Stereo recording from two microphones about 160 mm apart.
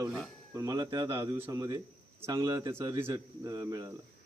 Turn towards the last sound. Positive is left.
turn(degrees=-25)  # may be behind; listen again after turning